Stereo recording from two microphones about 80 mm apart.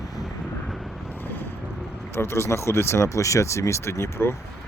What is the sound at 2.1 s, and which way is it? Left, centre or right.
Speech, left.